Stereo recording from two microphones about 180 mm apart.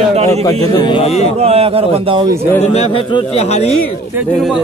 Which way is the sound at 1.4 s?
35° right (ahead or behind).